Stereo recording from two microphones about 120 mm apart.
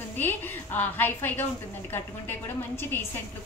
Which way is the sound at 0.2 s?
15° left (ahead or behind).